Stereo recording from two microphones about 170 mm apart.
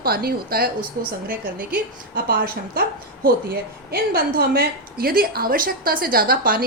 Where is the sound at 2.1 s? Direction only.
65° right (ahead or behind).